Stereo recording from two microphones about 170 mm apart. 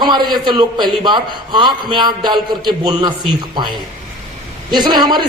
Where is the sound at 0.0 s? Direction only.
25° right (ahead or behind).